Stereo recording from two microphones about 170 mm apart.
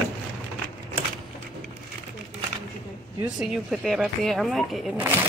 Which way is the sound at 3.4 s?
Centre (ahead or behind).